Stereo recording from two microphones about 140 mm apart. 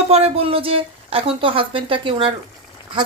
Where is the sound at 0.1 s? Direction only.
40° right (ahead or behind).